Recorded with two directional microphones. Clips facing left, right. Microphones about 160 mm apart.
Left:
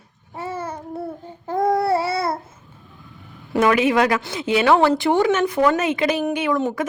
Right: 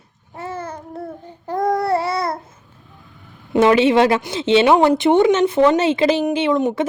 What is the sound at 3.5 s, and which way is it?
A woman's voice, 25° right (ahead or behind).